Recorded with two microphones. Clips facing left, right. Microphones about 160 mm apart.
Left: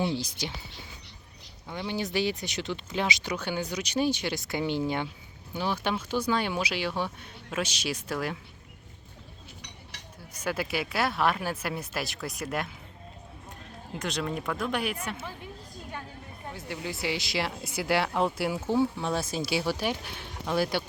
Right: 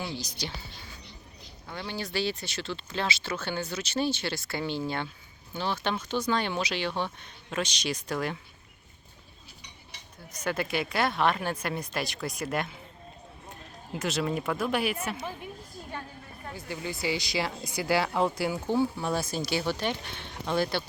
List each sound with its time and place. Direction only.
0.0 s speech: 25° left (ahead or behind)
1.6 s speech: 15° left (ahead or behind)
9.9 s chink: 80° left
10.3 s speech: 10° left (ahead or behind)
13.9 s speech: 5° right (ahead or behind)
15.2 s speech: 15° right (ahead or behind)
16.5 s speech: centre (ahead or behind)